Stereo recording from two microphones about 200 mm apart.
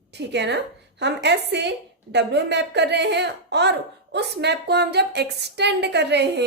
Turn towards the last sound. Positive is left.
turn(degrees=-60)  # may be behind; listen again after turning